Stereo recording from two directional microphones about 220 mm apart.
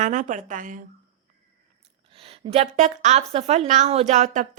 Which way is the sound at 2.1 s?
25° right (ahead or behind).